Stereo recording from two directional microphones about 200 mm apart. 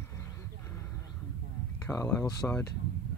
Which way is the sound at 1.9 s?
15° left (ahead or behind).